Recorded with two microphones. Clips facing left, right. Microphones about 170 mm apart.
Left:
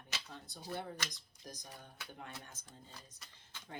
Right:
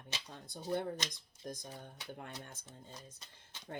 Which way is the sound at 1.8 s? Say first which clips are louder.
Right 3 dB; 55° right (ahead or behind).